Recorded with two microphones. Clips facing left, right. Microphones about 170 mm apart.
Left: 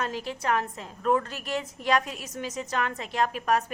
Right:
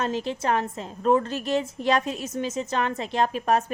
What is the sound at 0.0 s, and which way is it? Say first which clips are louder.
A woman's voice: right 4 dB; 25° right (ahead or behind).